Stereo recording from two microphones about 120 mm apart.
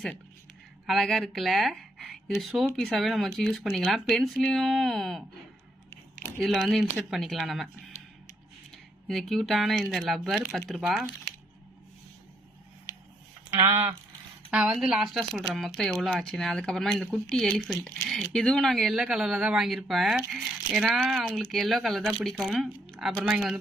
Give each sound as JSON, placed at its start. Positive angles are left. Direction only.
{"t": 0.9, "sound": "speech", "side_deg": 0}
{"t": 6.4, "sound": "speech", "side_deg": 0}
{"t": 8.7, "sound": "speech", "side_deg": 5}
{"t": 13.6, "sound": "speech", "side_deg": -20}
{"t": 14.5, "sound": "speech", "side_deg": -5}